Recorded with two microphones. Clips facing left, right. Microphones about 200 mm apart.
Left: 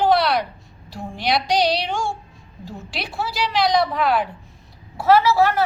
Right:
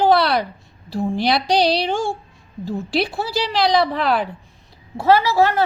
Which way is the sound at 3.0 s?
30° right (ahead or behind).